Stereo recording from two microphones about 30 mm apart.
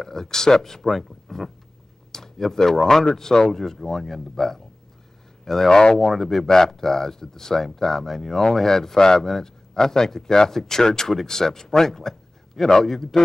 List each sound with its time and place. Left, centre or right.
0.0 s speech: centre
2.1 s speech: centre
5.7 s speech: left